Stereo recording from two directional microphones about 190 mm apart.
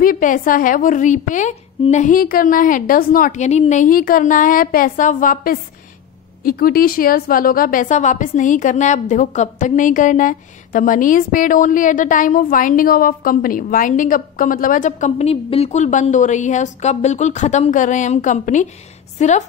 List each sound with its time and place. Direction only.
0.0 s a woman's voice: 45° left (ahead or behind)